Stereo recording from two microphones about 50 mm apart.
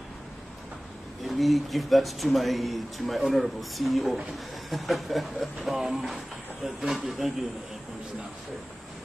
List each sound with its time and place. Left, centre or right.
1.2 s speech: centre